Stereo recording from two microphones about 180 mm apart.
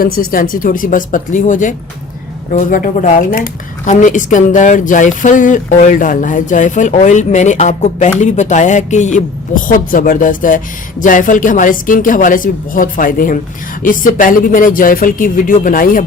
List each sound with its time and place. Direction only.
0.0 s speech: 50° left (ahead or behind)